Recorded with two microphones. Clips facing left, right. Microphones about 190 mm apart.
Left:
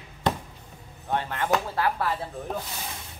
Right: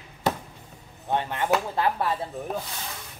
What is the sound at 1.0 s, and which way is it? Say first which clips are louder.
Speech: right 2 dB; 20° right (ahead or behind).